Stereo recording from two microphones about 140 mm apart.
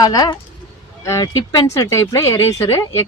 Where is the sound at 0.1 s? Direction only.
25° left (ahead or behind).